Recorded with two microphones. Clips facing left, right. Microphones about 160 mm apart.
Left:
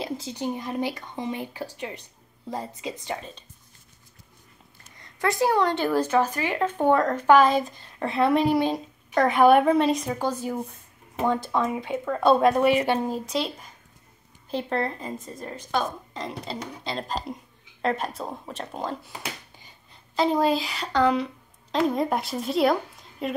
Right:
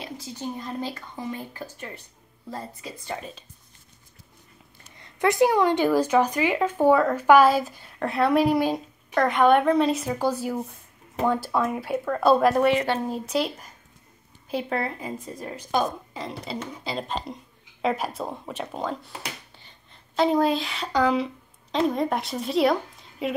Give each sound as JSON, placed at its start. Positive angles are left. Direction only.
{"t": 0.0, "sound": "a woman's voice", "side_deg": 20}
{"t": 4.9, "sound": "a woman's voice", "side_deg": -20}
{"t": 12.5, "sound": "a woman's voice", "side_deg": 10}
{"t": 13.1, "sound": "a woman's voice", "side_deg": -5}